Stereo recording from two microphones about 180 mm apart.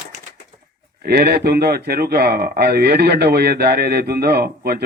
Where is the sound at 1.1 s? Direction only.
60° right (ahead or behind).